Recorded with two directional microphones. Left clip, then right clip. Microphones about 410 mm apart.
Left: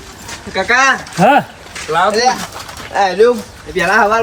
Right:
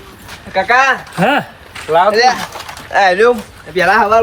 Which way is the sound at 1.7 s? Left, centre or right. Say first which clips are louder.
Right 3 dB; centre.